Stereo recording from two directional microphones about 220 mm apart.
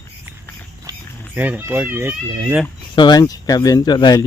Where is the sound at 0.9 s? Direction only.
15° right (ahead or behind).